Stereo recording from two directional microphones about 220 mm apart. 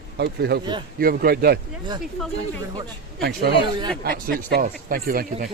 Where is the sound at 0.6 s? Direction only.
20° right (ahead or behind).